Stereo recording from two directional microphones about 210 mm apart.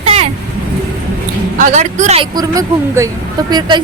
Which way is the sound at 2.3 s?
15° right (ahead or behind).